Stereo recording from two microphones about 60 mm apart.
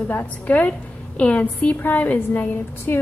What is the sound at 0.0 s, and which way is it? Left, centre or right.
A woman's voice, left.